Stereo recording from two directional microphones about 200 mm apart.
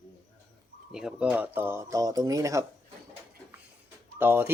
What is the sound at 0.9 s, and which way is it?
Speech, 5° right (ahead or behind).